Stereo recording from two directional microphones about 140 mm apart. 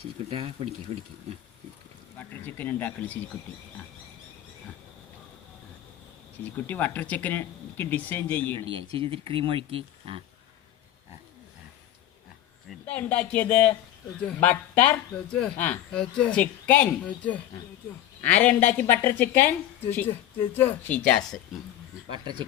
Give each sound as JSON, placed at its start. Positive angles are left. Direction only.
{"t": 0.3, "sound": "speech", "side_deg": -45}
{"t": 2.1, "sound": "speech", "side_deg": 15}
{"t": 6.7, "sound": "speech", "side_deg": 10}
{"t": 8.5, "sound": "speech", "side_deg": -40}
{"t": 12.8, "sound": "speech", "side_deg": 10}
{"t": 22.1, "sound": "speech", "side_deg": -35}